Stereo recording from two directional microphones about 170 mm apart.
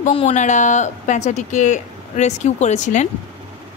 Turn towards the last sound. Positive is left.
turn(degrees=45)  # may be behind; listen again after turning